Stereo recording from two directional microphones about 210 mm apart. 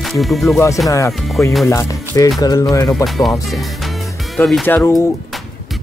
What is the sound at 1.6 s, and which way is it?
Speech, 15° left (ahead or behind).